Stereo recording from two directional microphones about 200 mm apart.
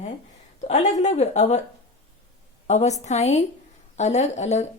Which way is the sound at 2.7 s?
35° left (ahead or behind).